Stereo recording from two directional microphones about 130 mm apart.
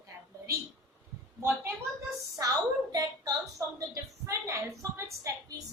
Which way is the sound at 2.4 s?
30° right (ahead or behind).